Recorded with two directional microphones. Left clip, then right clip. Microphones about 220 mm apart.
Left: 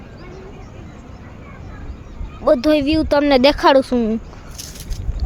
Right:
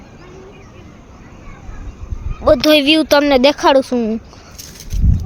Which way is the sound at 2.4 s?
5° right (ahead or behind).